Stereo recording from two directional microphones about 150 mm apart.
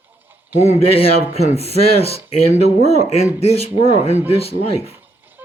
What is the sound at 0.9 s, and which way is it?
Speech, 45° left (ahead or behind).